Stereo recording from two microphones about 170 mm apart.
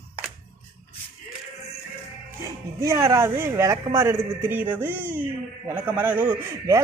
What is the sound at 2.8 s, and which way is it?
A man's voice, 15° right (ahead or behind).